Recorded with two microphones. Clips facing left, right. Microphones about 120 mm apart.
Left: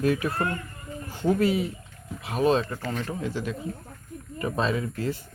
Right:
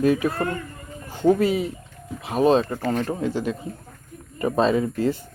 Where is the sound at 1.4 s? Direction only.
20° right (ahead or behind).